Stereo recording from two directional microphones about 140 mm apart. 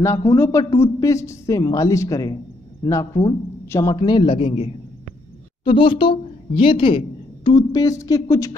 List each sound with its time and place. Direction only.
0.0 s speech: 20° left (ahead or behind)
3.9 s a man's voice: 35° left (ahead or behind)
8.0 s speech: 20° left (ahead or behind)